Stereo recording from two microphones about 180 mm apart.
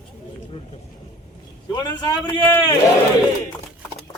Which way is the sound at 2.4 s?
10° left (ahead or behind).